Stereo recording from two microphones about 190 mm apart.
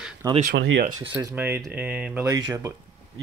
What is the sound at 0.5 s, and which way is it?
Speech, 70° right (ahead or behind).